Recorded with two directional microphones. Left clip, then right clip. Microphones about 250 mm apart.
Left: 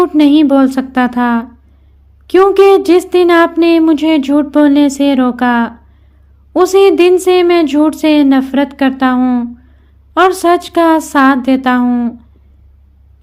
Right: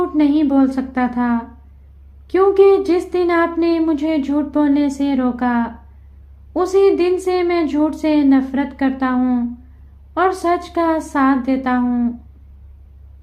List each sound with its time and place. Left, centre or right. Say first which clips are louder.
0.0 s speech: left 8 dB; left